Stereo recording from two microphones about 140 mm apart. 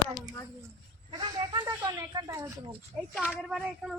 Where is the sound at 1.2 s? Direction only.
30° right (ahead or behind).